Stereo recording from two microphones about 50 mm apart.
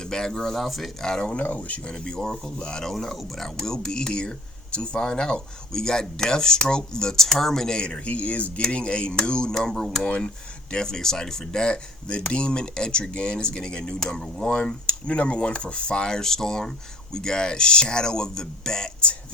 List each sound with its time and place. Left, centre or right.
0.0 s speech: centre
1.0 s speech: centre
1.4 s speech: left
2.9 s speech: centre